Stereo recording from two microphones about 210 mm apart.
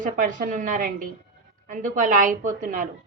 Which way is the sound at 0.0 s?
40° right (ahead or behind).